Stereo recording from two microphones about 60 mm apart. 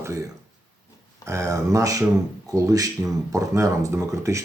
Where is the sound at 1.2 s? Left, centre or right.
Right.